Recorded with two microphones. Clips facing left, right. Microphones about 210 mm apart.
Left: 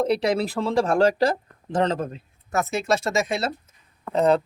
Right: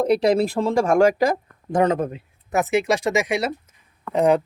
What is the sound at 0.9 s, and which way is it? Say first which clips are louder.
Speech: right 3 dB; 10° right (ahead or behind).